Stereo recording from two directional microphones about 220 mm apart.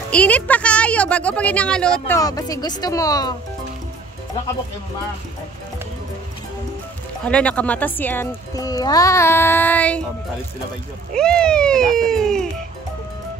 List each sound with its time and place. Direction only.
0.1 s a woman's voice: 5° left (ahead or behind)
2.1 s speech: 15° left (ahead or behind)
7.2 s speech: 5° left (ahead or behind)
11.1 s a woman's voice: 5° left (ahead or behind)